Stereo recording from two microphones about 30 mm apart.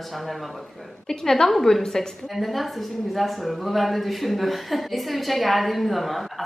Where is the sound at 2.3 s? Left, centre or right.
Centre.